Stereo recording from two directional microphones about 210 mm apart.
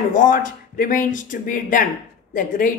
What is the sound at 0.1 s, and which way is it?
Speech, 40° left (ahead or behind).